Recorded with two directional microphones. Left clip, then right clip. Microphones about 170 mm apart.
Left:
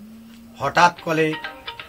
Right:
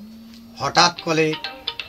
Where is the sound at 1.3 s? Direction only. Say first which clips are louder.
Right 3 dB; 30° right (ahead or behind).